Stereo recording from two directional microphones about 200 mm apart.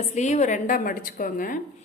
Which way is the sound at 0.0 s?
35° left (ahead or behind).